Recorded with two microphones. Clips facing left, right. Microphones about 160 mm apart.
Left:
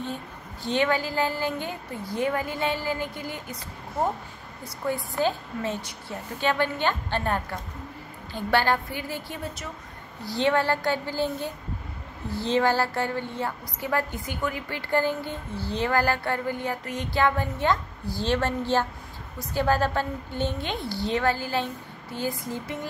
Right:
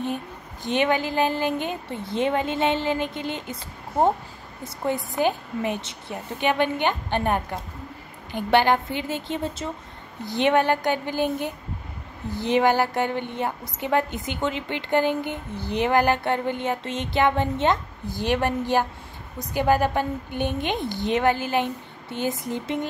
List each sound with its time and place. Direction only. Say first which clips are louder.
0.7 s a woman's voice: right 2 dB; 20° right (ahead or behind)
4.8 s a woman's voice: right 3 dB; 20° right (ahead or behind)